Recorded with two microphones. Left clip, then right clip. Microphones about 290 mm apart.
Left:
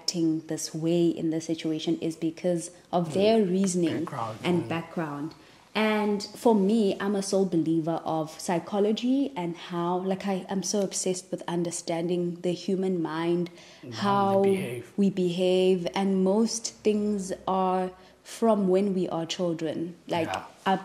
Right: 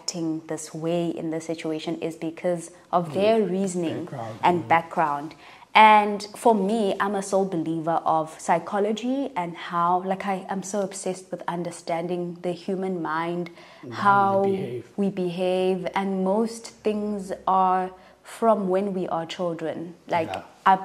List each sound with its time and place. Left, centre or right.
0.1 s a woman's voice: right
4.5 s a woman's voice: right
5.7 s speech: right
6.4 s a woman's voice: right